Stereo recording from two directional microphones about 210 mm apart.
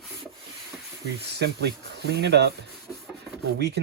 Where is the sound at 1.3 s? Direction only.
50° right (ahead or behind).